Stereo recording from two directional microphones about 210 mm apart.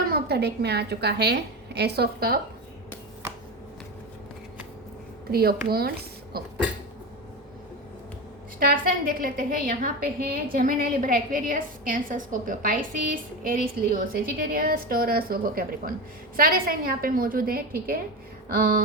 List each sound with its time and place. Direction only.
0.1 s a woman's voice: 50° right (ahead or behind)
5.3 s a woman's voice: 45° right (ahead or behind)
8.5 s a woman's voice: 45° right (ahead or behind)